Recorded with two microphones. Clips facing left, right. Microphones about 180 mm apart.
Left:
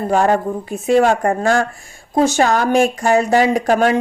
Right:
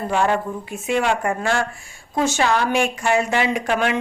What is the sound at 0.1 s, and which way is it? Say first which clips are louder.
Speech: left 5 dB; 40° left (ahead or behind).